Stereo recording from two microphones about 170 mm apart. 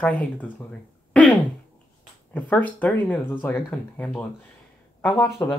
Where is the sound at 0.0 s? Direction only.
10° left (ahead or behind).